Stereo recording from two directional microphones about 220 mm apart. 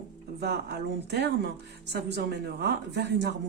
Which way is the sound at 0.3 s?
50° right (ahead or behind).